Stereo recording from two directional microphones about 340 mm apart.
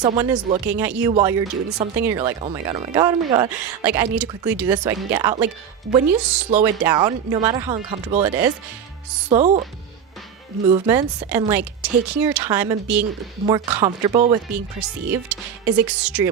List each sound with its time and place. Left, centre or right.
0.0 s a woman's voice: centre
9.3 s speech: right
10.7 s a woman's voice: centre
13.4 s speech: centre
15.3 s a woman's voice: centre